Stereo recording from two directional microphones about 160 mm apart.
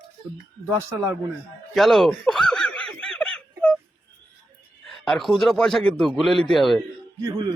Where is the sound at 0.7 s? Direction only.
15° right (ahead or behind).